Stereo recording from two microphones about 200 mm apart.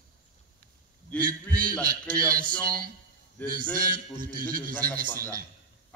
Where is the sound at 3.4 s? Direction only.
10° left (ahead or behind).